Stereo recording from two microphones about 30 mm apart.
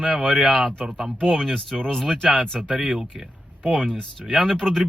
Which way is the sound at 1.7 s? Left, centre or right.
Centre.